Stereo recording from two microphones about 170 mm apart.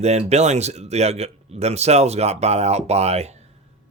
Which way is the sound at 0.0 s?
40° right (ahead or behind).